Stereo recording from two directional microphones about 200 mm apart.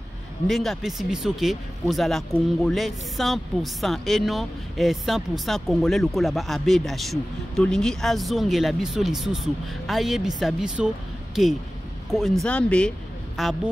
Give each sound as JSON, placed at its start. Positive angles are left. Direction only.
{"t": 0.5, "sound": "speech", "side_deg": 0}